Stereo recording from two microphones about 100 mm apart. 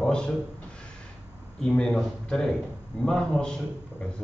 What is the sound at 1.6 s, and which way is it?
A man's voice, 5° left (ahead or behind).